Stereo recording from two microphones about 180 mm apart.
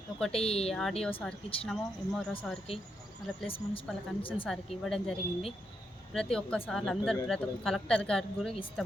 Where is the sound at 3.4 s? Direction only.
30° left (ahead or behind).